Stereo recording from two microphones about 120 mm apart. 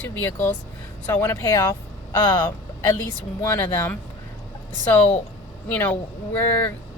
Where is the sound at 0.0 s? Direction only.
20° left (ahead or behind).